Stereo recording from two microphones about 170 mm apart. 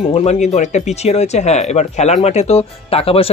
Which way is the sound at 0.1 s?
40° left (ahead or behind).